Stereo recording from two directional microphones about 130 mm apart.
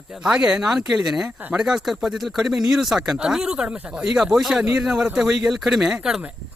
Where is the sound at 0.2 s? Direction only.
5° right (ahead or behind).